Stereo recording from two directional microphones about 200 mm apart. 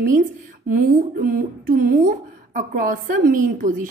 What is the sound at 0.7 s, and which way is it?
A woman's voice, 45° right (ahead or behind).